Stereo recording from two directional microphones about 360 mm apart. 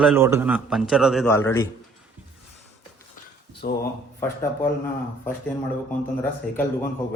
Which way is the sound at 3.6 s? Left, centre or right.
Left.